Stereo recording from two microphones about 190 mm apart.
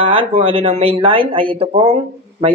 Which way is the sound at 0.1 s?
30° right (ahead or behind).